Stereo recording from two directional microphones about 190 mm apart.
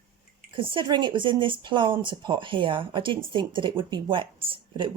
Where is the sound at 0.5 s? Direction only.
25° right (ahead or behind).